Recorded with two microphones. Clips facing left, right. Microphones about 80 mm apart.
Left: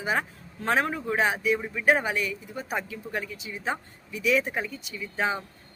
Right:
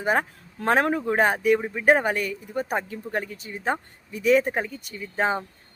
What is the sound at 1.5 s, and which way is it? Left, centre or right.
Speech, right.